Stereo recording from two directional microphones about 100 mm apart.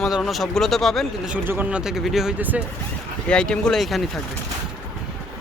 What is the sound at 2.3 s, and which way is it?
Speech, 15° right (ahead or behind).